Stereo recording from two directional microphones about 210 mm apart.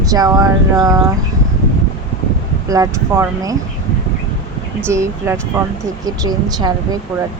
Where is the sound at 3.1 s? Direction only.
15° right (ahead or behind).